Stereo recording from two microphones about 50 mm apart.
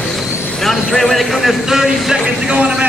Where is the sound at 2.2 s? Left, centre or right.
Right.